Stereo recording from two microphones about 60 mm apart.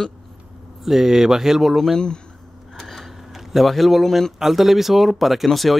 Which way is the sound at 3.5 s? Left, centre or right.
Centre.